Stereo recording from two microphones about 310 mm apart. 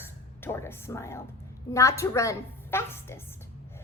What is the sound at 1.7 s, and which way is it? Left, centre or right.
A woman's voice, centre.